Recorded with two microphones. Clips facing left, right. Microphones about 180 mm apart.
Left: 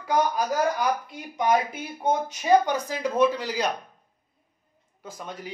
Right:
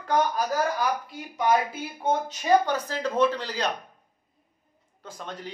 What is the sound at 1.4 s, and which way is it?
A man's voice, 15° left (ahead or behind).